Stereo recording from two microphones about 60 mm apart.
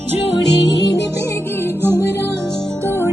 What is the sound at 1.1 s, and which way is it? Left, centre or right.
Music, left.